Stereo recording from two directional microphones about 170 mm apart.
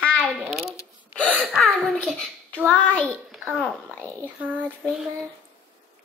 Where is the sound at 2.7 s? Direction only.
10° left (ahead or behind).